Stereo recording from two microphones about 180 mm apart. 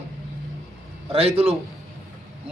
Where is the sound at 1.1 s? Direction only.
35° right (ahead or behind).